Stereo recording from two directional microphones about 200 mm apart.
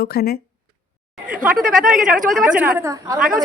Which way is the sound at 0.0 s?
50° left (ahead or behind).